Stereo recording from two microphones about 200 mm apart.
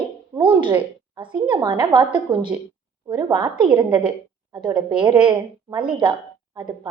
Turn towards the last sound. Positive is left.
turn(degrees=-25)  # may be behind; listen again after turning